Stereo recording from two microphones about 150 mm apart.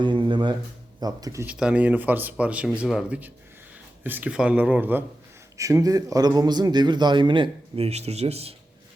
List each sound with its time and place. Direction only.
0.0 s a man's voice: 35° right (ahead or behind)
1.5 s a man's voice: 5° right (ahead or behind); by 8.5 s 45° right (ahead or behind)